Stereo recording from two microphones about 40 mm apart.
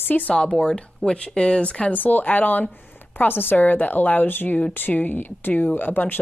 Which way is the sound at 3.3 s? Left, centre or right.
Left.